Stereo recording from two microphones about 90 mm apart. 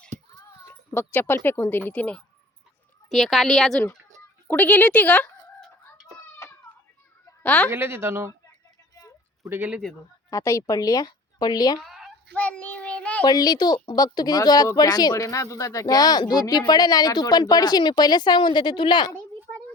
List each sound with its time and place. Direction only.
0.7 s speech: 25° left (ahead or behind)
3.1 s a woman's voice: centre (ahead or behind)
4.4 s speech: 20° left (ahead or behind)
6.4 s a sound: 35° left (ahead or behind)
7.4 s a woman's voice: 15° left (ahead or behind)
7.7 s speech: 25° right (ahead or behind)
9.4 s speech: 25° right (ahead or behind)
10.2 s a woman's voice: 35° left (ahead or behind)
11.9 s a sound: centre (ahead or behind)
12.3 s child singing: 15° left (ahead or behind)
13.2 s a woman's voice: 50° left (ahead or behind)